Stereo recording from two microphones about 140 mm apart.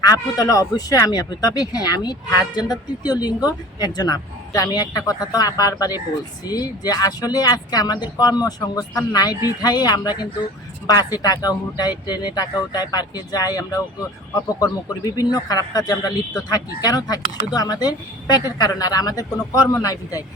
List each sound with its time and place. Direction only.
0.0 s speech: 25° left (ahead or behind)